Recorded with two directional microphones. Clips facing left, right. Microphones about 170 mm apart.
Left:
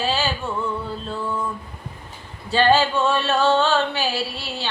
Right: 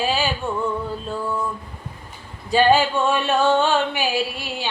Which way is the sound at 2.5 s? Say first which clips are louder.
Right 1 dB; 10° right (ahead or behind).